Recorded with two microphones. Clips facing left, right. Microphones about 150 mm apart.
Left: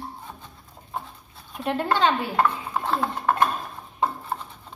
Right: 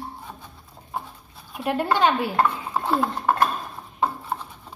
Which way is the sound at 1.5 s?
10° right (ahead or behind).